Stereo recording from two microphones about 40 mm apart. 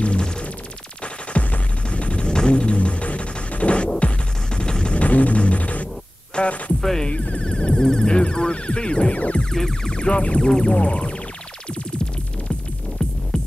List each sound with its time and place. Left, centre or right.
0.0 s a sound: left
1.0 s music: left
4.9 s a sound: left
6.8 s music: centre
7.1 s music: left
9.5 s music: centre
9.9 s music: left